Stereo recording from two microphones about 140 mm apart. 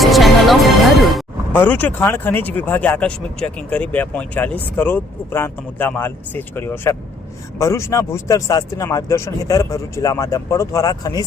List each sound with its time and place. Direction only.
0.0 s music: centre (ahead or behind)
1.5 s speech: 15° left (ahead or behind); by 11.3 s 30° left (ahead or behind)